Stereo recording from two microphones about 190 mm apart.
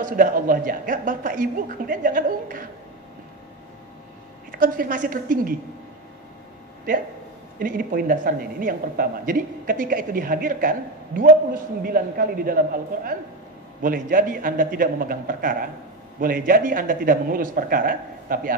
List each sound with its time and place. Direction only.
0.0 s speech: 45° right (ahead or behind)
4.5 s speech: 45° right (ahead or behind)
7.5 s speech: 45° right (ahead or behind)